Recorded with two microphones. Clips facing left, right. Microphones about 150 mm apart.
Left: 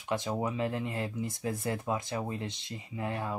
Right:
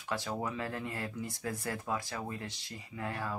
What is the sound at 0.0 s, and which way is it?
Speech, 20° left (ahead or behind).